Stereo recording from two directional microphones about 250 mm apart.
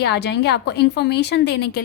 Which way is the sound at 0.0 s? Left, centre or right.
Left.